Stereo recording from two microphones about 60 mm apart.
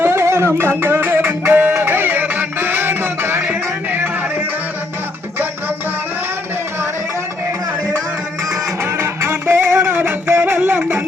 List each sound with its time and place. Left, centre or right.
0.0 s music: right
3.4 s music: right
8.8 s music: right
9.8 s music: right